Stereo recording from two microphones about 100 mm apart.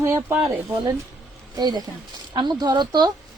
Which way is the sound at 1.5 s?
40° right (ahead or behind).